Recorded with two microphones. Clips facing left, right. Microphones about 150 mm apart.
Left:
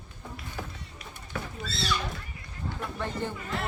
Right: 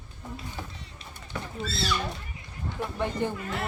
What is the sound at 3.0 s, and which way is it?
Speech, 15° right (ahead or behind).